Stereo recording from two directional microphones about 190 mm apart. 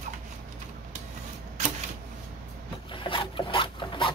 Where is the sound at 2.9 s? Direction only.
25° left (ahead or behind).